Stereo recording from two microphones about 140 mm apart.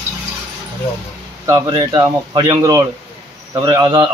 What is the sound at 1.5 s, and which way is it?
Speech, 30° right (ahead or behind).